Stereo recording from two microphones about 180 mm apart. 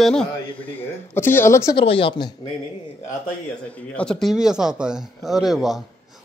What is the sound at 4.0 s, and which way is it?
A man's voice, 5° left (ahead or behind).